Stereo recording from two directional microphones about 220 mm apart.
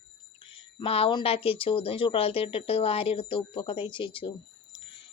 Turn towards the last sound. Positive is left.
turn(degrees=20)  # may be behind; listen again after turning